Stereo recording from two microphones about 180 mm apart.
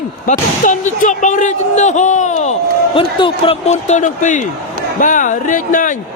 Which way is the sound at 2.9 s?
25° left (ahead or behind).